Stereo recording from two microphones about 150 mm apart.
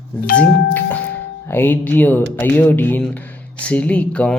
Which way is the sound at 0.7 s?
15° left (ahead or behind).